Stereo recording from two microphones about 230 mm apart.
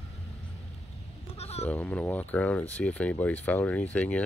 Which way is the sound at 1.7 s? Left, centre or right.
Centre.